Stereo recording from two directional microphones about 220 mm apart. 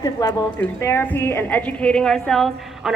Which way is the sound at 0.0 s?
15° left (ahead or behind).